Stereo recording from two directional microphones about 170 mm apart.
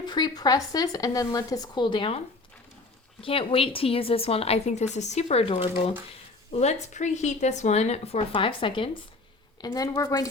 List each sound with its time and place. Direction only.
0.0 s a woman's voice: 25° left (ahead or behind)